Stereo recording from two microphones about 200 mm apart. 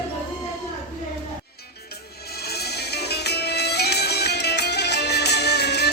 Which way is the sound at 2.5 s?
55° left (ahead or behind).